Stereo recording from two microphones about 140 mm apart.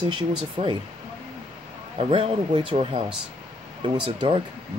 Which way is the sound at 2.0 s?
40° right (ahead or behind).